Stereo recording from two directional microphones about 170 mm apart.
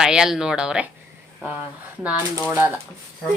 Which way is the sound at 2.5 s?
10° right (ahead or behind).